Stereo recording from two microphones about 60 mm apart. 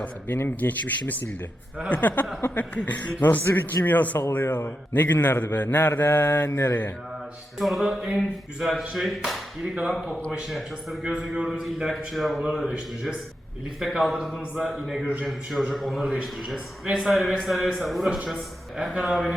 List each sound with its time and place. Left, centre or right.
0.3 s a man's voice: left
7.6 s a man's voice: centre
11.2 s a man's voice: centre